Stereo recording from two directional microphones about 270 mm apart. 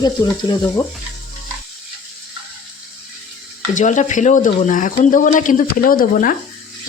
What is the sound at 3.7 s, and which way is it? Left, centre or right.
Speech, left.